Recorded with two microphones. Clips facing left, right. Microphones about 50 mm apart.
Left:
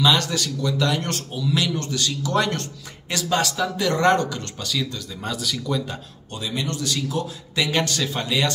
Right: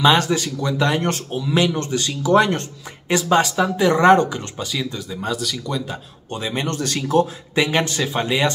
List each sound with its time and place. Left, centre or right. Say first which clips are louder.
0.0 s speech: right 4 dB; right
5.2 s speech: right 2 dB; centre
6.3 s speech: right 4 dB; right
7.5 s speech: right 4 dB; right